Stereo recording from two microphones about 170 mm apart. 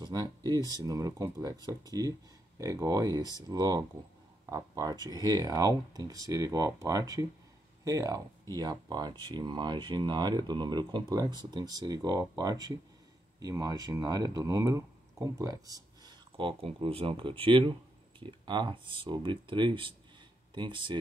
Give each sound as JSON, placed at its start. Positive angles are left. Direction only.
{"t": 0.0, "sound": "speech", "side_deg": -20}